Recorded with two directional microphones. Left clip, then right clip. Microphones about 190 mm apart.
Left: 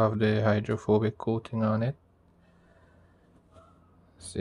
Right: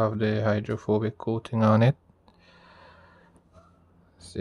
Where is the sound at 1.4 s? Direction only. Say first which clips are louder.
Right 5 dB; 15° right (ahead or behind).